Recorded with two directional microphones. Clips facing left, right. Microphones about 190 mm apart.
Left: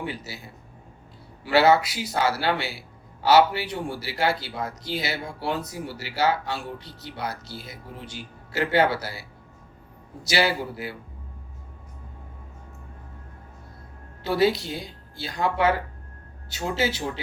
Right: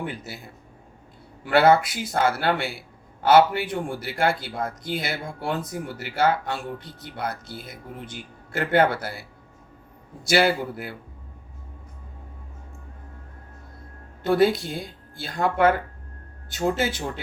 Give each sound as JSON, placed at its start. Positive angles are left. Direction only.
{"t": 0.0, "sound": "speech", "side_deg": -50}
{"t": 10.2, "sound": "speech", "side_deg": -50}
{"t": 14.2, "sound": "speech", "side_deg": -50}